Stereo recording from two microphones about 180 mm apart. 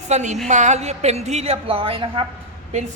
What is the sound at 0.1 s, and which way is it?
A woman's voice, 40° right (ahead or behind).